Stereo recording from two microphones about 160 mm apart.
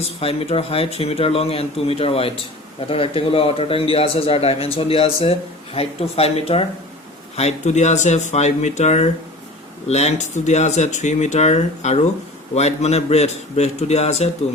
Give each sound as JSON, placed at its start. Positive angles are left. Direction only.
{"t": 0.0, "sound": "a man's voice", "side_deg": 35}